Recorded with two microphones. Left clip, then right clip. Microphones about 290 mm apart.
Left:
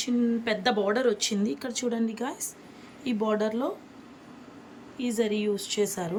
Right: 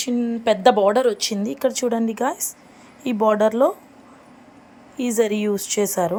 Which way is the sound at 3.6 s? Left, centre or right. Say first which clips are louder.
Right 14 dB; right.